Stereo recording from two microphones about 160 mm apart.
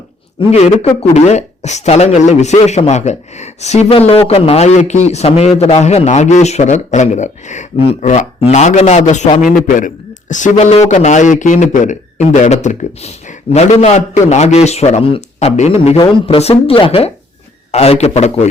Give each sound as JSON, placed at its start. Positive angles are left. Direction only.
{"t": 0.3, "sound": "speech", "side_deg": 40}